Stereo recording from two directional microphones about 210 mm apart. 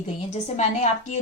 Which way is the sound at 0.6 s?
35° left (ahead or behind).